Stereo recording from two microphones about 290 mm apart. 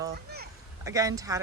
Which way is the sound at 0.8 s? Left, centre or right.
Centre.